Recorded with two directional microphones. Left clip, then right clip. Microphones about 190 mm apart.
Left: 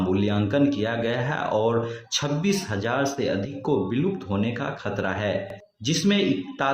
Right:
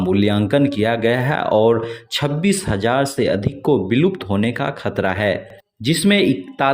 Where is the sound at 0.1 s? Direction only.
45° right (ahead or behind).